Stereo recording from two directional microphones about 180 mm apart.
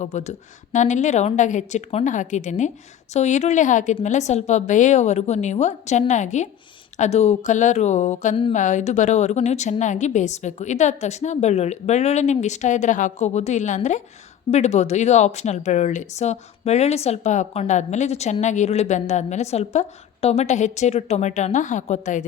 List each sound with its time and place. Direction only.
0.0 s a woman's voice: 40° left (ahead or behind)